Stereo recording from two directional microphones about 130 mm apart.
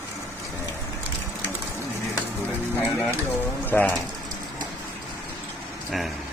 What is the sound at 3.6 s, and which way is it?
Speech, 15° left (ahead or behind).